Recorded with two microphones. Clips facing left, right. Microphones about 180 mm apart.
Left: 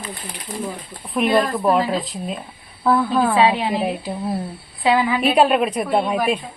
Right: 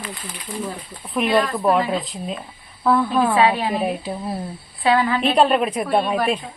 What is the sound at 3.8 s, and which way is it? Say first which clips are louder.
Speech: even; centre (ahead or behind).